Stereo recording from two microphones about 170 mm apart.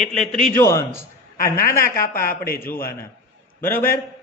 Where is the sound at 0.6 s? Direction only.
20° left (ahead or behind).